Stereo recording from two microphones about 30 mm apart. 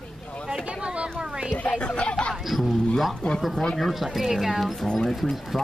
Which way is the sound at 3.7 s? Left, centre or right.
Centre.